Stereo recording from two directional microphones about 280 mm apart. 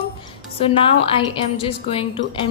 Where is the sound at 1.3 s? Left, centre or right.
Centre.